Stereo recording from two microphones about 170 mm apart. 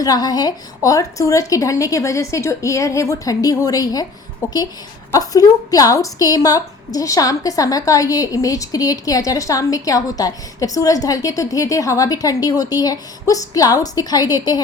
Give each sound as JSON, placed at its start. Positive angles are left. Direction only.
{"t": 0.0, "sound": "a woman's voice", "side_deg": 25}
{"t": 5.1, "sound": "a woman's voice", "side_deg": 20}